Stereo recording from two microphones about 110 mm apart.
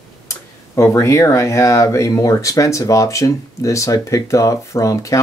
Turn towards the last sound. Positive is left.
turn(degrees=30)  # may be behind; listen again after turning